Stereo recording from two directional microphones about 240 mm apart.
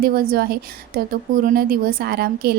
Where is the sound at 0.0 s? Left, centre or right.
Right.